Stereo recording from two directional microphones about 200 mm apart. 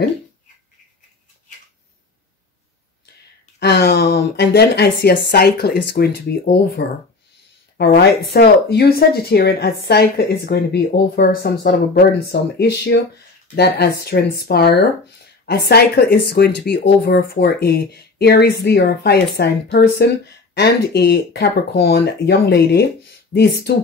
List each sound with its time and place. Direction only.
3.5 s speech: 55° left (ahead or behind)
7.7 s speech: 50° left (ahead or behind)
23.7 s speech: 55° left (ahead or behind)